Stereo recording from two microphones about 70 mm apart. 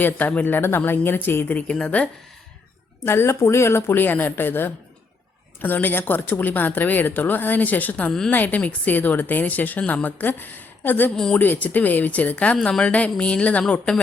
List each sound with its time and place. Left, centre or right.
0.0 s a woman's voice: left
1.5 s speech: centre
3.0 s a woman's voice: left
11.1 s speech: centre
11.3 s speech: left
12.5 s speech: centre